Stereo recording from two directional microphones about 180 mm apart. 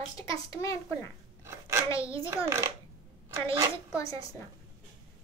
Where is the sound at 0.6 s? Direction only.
15° left (ahead or behind).